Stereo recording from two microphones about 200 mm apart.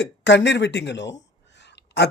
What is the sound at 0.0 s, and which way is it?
Speech, 60° left (ahead or behind).